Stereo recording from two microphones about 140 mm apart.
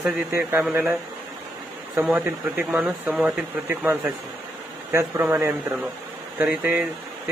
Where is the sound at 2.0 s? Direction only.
10° right (ahead or behind).